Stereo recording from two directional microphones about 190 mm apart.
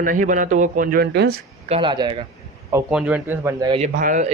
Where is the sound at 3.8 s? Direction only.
45° right (ahead or behind).